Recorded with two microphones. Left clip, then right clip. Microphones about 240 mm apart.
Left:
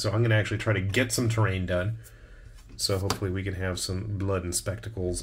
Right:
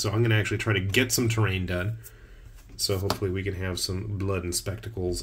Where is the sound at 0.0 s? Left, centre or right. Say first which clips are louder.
Even; centre.